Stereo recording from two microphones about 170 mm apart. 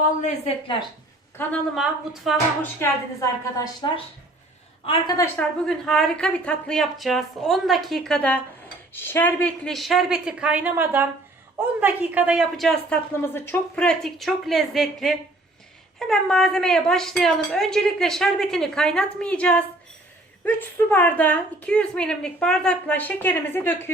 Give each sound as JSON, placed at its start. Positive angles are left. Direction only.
{"t": 0.2, "sound": "a woman's voice", "side_deg": 45}
{"t": 1.4, "sound": "a woman's voice", "side_deg": 10}
{"t": 1.7, "sound": "a woman's voice", "side_deg": 0}
{"t": 2.8, "sound": "a woman's voice", "side_deg": 20}
{"t": 5.4, "sound": "a woman's voice", "side_deg": 5}
{"t": 13.3, "sound": "a woman's voice", "side_deg": 10}